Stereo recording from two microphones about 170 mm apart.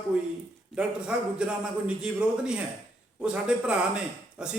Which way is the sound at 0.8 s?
5° right (ahead or behind).